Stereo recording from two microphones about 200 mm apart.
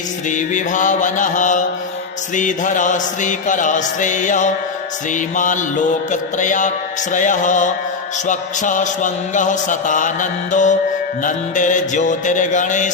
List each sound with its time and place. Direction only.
0.3 s music: 40° left (ahead or behind)